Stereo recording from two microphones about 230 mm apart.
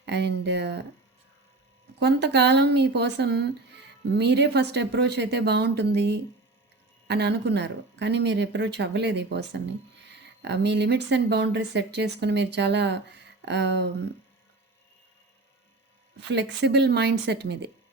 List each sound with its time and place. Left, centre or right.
0.0 s a sound: right
2.0 s speech: right
16.3 s speech: right